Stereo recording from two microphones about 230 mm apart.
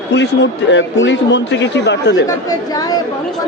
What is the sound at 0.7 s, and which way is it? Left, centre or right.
A man's voice, left.